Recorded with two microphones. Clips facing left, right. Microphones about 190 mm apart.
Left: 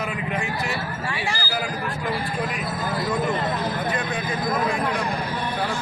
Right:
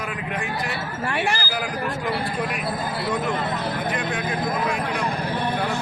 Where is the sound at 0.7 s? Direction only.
60° right (ahead or behind).